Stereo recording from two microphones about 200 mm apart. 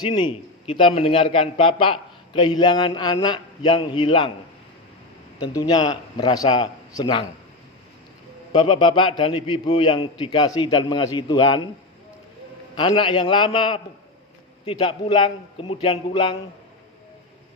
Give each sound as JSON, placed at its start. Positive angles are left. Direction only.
{"t": 0.0, "sound": "a man's voice", "side_deg": 20}
{"t": 5.5, "sound": "a man's voice", "side_deg": 20}
{"t": 8.5, "sound": "a man's voice", "side_deg": 25}
{"t": 12.7, "sound": "a man's voice", "side_deg": 25}